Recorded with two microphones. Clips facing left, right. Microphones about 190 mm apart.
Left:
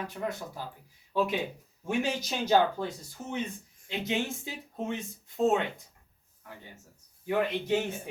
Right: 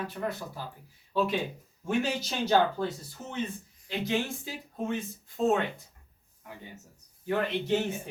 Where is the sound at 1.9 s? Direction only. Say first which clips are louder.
Right 1 dB; 10° left (ahead or behind).